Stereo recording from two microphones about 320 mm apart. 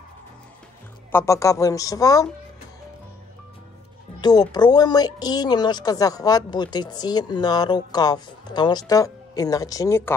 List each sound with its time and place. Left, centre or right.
1.1 s a woman's voice: centre
4.2 s a woman's voice: centre